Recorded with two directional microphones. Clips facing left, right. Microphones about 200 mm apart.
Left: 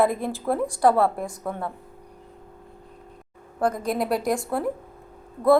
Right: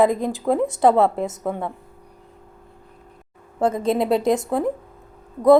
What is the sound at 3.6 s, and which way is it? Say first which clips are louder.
A woman's voice: right 4 dB; 25° right (ahead or behind).